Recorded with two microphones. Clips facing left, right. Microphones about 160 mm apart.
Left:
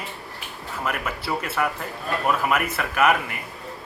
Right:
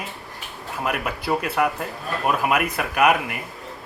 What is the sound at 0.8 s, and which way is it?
Speech, 15° right (ahead or behind).